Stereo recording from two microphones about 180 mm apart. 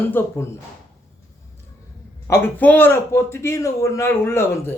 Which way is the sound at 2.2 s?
10° left (ahead or behind).